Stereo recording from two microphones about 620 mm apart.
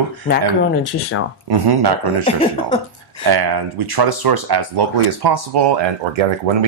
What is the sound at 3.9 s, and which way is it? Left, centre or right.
Speech, right.